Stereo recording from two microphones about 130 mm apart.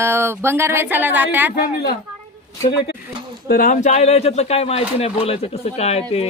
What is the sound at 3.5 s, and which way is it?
Speech, 80° left.